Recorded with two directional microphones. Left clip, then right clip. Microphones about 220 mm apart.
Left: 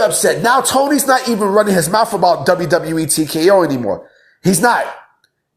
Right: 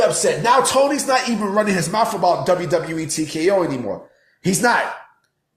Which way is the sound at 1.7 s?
5° left (ahead or behind).